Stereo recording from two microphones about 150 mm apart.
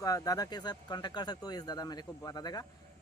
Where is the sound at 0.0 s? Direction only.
25° left (ahead or behind).